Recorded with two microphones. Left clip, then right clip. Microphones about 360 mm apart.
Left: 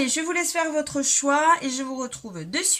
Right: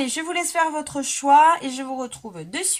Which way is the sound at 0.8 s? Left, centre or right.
Centre.